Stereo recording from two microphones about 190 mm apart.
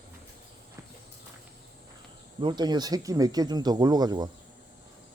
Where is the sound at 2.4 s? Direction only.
25° right (ahead or behind).